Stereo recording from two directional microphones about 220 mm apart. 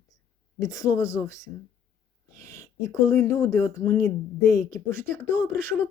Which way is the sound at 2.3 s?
15° left (ahead or behind).